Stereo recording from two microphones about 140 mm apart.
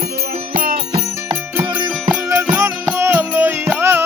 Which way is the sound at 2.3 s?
20° right (ahead or behind).